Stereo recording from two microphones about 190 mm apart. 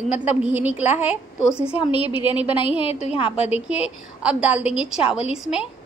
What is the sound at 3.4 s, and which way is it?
A woman's voice, 5° right (ahead or behind).